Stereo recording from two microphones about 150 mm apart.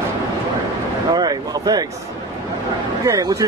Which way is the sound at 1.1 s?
25° right (ahead or behind).